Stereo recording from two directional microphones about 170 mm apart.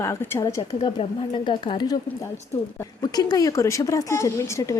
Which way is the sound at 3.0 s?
20° left (ahead or behind).